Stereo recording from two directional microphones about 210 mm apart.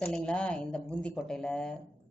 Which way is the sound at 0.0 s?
5° left (ahead or behind).